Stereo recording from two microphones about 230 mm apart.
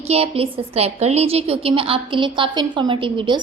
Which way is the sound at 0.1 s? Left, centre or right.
Right.